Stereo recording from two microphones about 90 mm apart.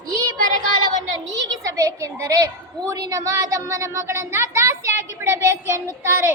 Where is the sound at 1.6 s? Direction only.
35° right (ahead or behind).